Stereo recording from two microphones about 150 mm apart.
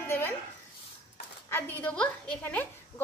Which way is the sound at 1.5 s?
15° left (ahead or behind).